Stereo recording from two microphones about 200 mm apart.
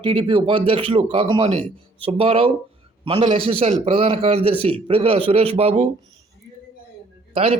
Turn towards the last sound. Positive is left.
turn(degrees=-30)  # may be behind; listen again after turning